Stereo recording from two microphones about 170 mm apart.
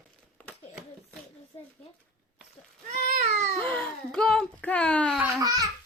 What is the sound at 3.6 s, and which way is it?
Baby cry, 5° left (ahead or behind).